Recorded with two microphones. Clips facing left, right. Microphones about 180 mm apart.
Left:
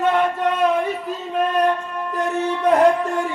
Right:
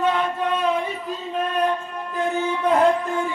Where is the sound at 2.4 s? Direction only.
65° left (ahead or behind).